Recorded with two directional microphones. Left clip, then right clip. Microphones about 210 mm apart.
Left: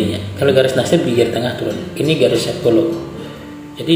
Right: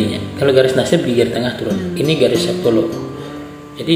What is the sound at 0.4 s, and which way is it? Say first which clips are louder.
Speech: right 1 dB; 5° right (ahead or behind).